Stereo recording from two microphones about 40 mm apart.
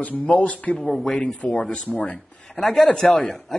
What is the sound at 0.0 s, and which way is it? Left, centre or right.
Speech, left.